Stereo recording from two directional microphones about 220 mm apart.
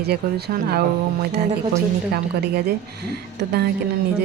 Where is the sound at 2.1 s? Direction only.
45° right (ahead or behind).